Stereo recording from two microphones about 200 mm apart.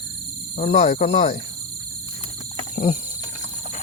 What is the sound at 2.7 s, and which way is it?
Wild animals, 35° left (ahead or behind).